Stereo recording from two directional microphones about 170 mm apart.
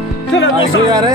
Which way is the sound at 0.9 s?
20° right (ahead or behind).